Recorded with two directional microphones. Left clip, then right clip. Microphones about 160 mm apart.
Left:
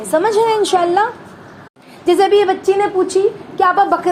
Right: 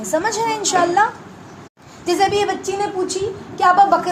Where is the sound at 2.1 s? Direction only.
25° left (ahead or behind).